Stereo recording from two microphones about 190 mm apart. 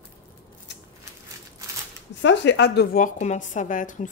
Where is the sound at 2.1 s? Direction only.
70° left (ahead or behind); by 4.1 s 40° left (ahead or behind).